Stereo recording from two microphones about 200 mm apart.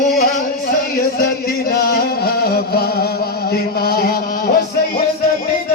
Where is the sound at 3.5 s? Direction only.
50° left (ahead or behind).